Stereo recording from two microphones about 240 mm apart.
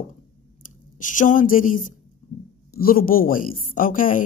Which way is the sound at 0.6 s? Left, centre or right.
Left.